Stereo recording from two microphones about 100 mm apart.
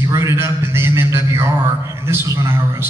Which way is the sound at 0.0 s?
30° right (ahead or behind).